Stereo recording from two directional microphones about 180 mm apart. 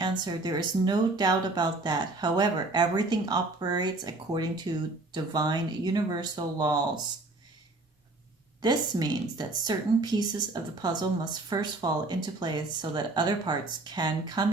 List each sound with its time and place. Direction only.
0.0 s a woman's voice: 25° right (ahead or behind)
8.6 s a woman's voice: 25° right (ahead or behind)